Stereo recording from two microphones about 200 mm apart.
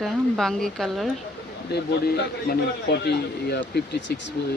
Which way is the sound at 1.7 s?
55° left (ahead or behind).